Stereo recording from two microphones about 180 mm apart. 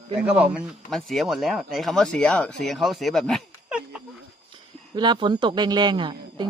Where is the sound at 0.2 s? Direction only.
5° right (ahead or behind).